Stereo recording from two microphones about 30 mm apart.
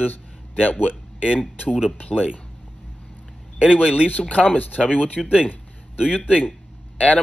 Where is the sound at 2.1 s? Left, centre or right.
Right.